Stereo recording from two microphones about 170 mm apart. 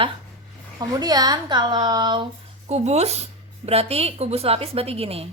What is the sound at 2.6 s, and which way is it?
Speech, 40° right (ahead or behind).